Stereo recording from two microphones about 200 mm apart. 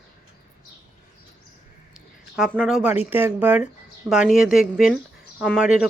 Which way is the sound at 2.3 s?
Centre (ahead or behind).